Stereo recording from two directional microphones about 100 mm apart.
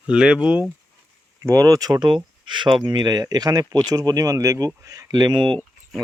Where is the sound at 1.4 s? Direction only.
35° right (ahead or behind).